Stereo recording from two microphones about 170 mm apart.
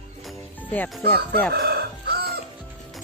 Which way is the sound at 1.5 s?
65° right (ahead or behind).